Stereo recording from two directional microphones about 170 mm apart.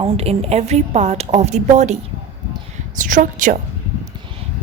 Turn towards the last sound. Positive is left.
turn(degrees=-50)  # may be behind; listen again after turning